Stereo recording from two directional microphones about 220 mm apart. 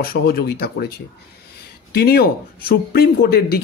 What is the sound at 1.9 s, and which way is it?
Speech, 45° left (ahead or behind).